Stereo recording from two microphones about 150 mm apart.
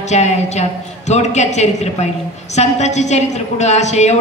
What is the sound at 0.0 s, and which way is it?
A man's voice, 50° left (ahead or behind).